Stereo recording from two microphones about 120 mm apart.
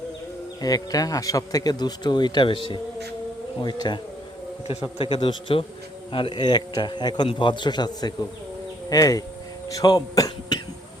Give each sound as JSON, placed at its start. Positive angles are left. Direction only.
{"t": 0.6, "sound": "a man's voice", "side_deg": 30}